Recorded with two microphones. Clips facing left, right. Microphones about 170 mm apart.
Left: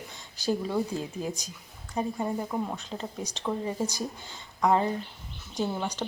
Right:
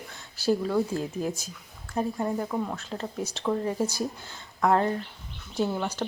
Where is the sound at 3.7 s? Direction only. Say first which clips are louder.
Right 3 dB; 10° right (ahead or behind).